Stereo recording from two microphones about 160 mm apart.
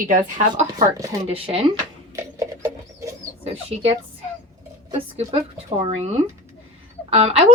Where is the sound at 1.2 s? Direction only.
40° right (ahead or behind).